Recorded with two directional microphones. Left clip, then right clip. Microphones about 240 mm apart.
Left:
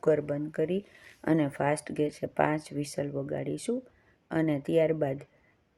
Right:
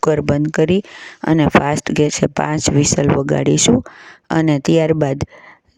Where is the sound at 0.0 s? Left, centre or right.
Right.